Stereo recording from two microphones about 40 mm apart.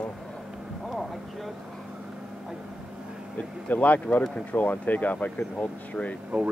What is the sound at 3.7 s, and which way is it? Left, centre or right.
Speech, left.